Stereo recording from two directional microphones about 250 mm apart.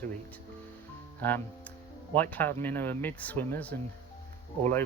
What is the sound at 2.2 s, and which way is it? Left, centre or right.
Speech, centre.